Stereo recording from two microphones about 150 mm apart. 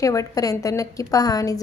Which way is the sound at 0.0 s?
20° left (ahead or behind).